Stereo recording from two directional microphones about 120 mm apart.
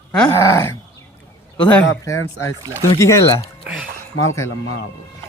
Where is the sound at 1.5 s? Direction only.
10° left (ahead or behind).